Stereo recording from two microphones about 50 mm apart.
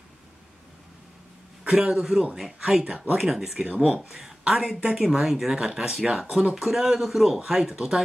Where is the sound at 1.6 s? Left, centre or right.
Centre.